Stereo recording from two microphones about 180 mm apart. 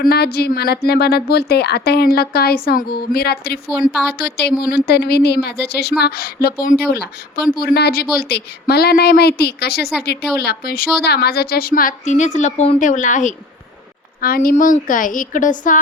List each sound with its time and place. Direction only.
0.0 s a woman's voice: 60° left (ahead or behind)